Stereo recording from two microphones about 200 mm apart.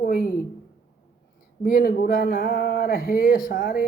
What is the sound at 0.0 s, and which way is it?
Speech, 45° left (ahead or behind).